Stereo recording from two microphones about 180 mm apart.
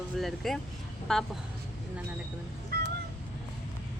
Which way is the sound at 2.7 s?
55° right (ahead or behind).